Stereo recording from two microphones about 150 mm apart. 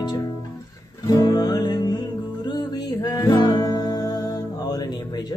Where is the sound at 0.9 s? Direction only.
25° left (ahead or behind).